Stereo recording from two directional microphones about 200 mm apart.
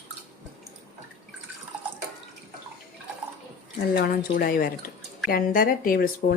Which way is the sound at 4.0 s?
50° left (ahead or behind).